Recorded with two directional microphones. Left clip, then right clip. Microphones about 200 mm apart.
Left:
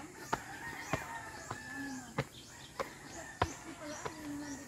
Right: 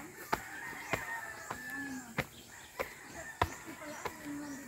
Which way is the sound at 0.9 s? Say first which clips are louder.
Right 2 dB; 65° right (ahead or behind).